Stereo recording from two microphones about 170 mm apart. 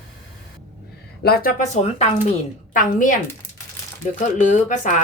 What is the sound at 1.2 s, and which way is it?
A woman's voice, 60° left (ahead or behind).